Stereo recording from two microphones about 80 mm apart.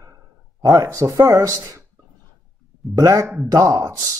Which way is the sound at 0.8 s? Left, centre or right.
Right.